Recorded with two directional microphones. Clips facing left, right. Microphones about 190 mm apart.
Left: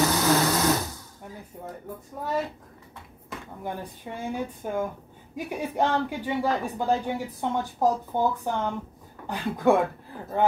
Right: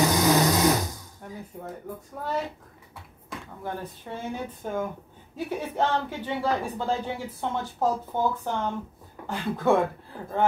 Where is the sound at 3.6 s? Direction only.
15° left (ahead or behind).